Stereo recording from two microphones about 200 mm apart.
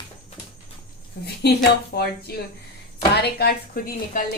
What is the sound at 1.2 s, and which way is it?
Speech, 55° left (ahead or behind).